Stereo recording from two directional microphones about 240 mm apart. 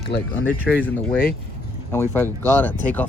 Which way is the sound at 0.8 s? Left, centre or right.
Centre.